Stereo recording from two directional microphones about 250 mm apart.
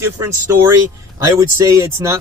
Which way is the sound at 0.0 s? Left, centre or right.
Centre.